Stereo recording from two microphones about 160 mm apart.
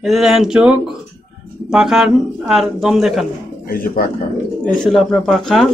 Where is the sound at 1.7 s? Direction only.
5° right (ahead or behind).